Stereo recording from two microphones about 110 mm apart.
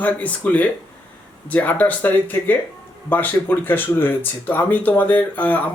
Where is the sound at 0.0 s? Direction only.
15° left (ahead or behind).